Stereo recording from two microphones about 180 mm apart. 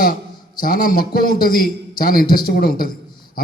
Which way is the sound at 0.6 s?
55° left (ahead or behind).